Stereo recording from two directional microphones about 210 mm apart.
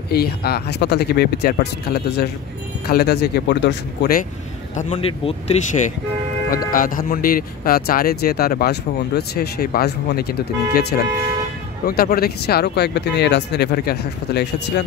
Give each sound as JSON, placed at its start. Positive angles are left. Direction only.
{"t": 0.1, "sound": "speech", "side_deg": 50}
{"t": 4.7, "sound": "speech", "side_deg": 35}